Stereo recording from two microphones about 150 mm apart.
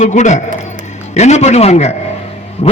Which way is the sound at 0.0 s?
50° left (ahead or behind).